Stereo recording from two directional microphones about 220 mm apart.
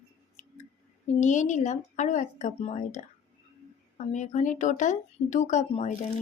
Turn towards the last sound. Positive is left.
turn(degrees=30)  # may be behind; listen again after turning